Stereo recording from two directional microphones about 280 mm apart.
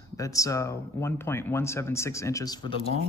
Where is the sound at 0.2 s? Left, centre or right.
Centre.